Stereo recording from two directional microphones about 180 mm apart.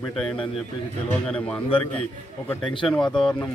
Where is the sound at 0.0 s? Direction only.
5° left (ahead or behind).